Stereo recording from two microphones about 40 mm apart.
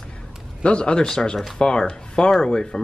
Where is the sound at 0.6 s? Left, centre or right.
Left.